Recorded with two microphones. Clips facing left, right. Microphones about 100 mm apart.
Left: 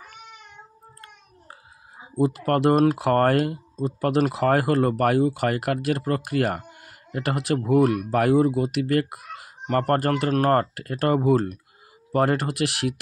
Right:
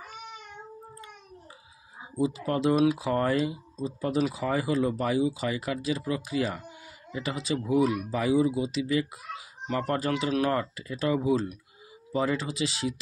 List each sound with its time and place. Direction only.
2.1 s speech: 60° left (ahead or behind)
11.1 s speech: 50° left (ahead or behind)
12.1 s speech: 65° left (ahead or behind)